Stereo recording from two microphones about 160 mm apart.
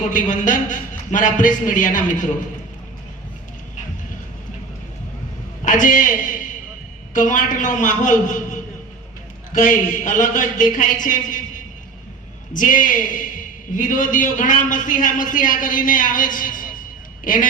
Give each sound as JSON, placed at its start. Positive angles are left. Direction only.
{"t": 0.0, "sound": "a man's voice", "side_deg": 55}
{"t": 5.6, "sound": "a man's voice", "side_deg": 55}